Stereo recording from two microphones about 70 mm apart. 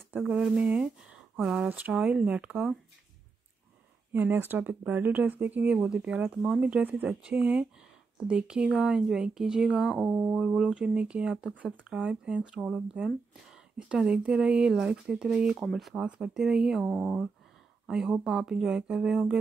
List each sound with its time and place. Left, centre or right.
0.3 s speech: centre
4.1 s speech: right
5.8 s speech: centre
10.0 s speech: right
10.3 s speech: centre
12.6 s speech: centre
15.4 s speech: centre